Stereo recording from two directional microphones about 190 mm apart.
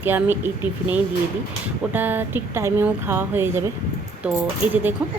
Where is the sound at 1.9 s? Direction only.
10° right (ahead or behind).